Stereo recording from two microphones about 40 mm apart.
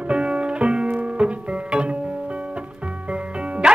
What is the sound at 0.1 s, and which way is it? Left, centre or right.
Music, right.